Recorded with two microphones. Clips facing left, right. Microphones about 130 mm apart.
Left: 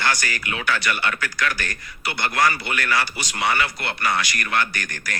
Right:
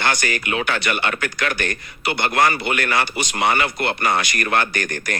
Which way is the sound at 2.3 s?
55° right (ahead or behind).